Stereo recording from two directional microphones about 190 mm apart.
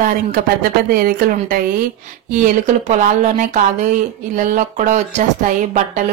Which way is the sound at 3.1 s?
40° right (ahead or behind).